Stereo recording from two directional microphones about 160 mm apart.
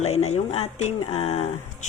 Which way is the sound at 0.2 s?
45° left (ahead or behind).